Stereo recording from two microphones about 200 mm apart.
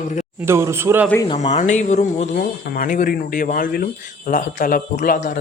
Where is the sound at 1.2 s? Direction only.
30° left (ahead or behind).